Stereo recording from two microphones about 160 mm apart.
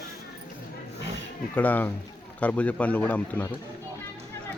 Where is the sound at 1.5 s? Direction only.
10° left (ahead or behind).